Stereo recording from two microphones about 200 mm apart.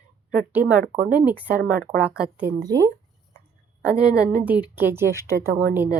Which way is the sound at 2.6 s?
20° right (ahead or behind).